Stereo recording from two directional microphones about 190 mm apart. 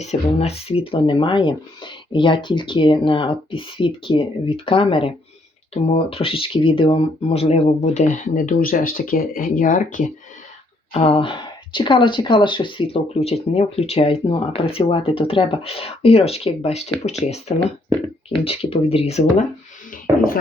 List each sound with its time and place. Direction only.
0.0 s speech: 35° left (ahead or behind)
10.9 s speech: 30° left (ahead or behind)
18.3 s speech: 30° left (ahead or behind)
20.1 s speech: 15° right (ahead or behind)